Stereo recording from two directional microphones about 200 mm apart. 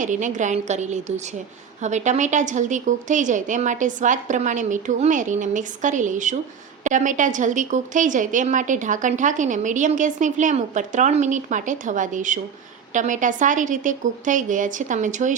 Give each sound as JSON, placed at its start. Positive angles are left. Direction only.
{"t": 0.0, "sound": "a woman's voice", "side_deg": -40}